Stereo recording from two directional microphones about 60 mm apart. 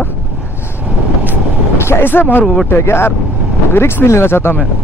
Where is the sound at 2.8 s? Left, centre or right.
Left.